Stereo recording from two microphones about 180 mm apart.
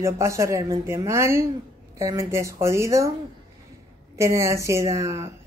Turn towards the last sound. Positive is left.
turn(degrees=-15)  # may be behind; listen again after turning